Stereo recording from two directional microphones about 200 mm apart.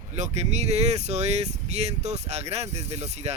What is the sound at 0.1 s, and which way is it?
Speech, 35° right (ahead or behind).